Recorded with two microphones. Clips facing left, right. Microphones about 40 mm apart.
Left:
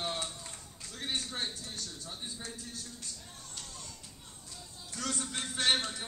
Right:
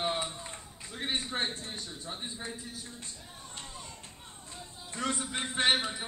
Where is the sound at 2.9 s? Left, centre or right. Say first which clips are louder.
Right 1 dB; right.